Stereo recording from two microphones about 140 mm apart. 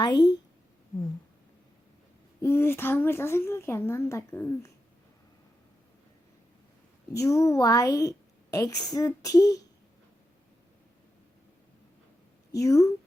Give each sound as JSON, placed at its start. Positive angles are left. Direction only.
{"t": 0.0, "sound": "a woman's voice", "side_deg": 30}
{"t": 2.4, "sound": "speech", "side_deg": 15}
{"t": 7.1, "sound": "a woman's voice", "side_deg": 20}
{"t": 12.5, "sound": "a woman's voice", "side_deg": 25}